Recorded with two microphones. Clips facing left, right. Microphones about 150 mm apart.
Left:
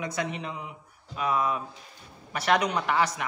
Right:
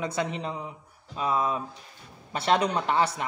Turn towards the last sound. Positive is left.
turn(degrees=-30)  # may be behind; listen again after turning